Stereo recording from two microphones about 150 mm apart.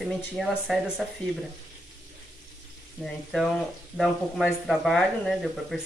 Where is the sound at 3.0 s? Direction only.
Centre (ahead or behind).